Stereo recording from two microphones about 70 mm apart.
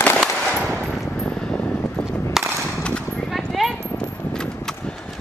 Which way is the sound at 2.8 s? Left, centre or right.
Centre.